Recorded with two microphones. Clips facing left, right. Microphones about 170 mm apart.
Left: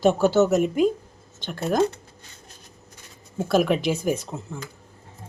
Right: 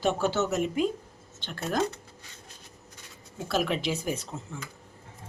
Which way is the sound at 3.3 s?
50° left (ahead or behind).